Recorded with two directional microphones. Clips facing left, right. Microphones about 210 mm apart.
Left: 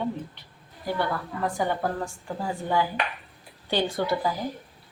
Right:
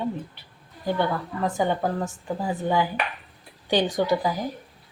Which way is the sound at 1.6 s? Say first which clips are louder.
Right 3 dB; 20° right (ahead or behind).